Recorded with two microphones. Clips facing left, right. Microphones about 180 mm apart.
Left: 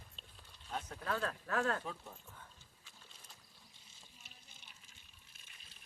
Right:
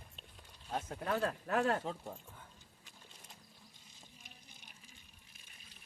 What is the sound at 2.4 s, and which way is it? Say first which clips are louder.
Dog: right 1 dB; 15° right (ahead or behind).